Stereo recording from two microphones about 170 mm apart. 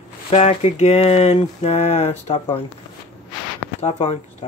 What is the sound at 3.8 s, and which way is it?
Speech, 35° left (ahead or behind).